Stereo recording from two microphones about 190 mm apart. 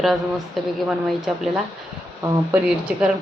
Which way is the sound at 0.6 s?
Centre (ahead or behind).